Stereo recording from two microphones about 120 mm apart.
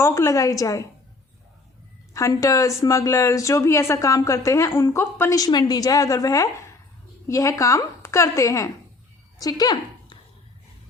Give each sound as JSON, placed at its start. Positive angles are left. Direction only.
{"t": 0.0, "sound": "speech", "side_deg": 25}
{"t": 2.1, "sound": "speech", "side_deg": 30}
{"t": 5.4, "sound": "speech", "side_deg": 35}